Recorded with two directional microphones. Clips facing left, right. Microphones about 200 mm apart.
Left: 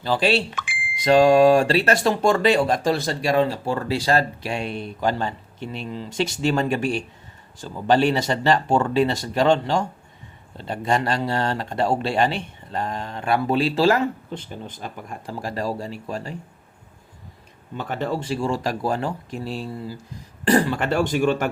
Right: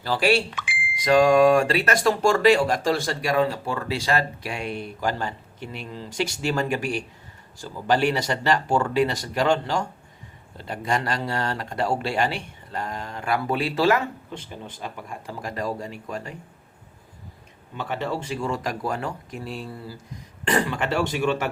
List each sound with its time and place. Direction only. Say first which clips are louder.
0.0 s speech: left 1 dB; 20° left (ahead or behind)
0.5 s a sound: left 1 dB; 45° left (ahead or behind)
1.0 s speech: left 2 dB; 30° left (ahead or behind)
17.7 s speech: left 2 dB; 45° left (ahead or behind)